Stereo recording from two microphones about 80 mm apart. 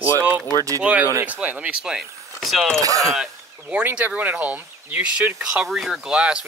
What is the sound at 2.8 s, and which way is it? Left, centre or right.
Mechanisms, right.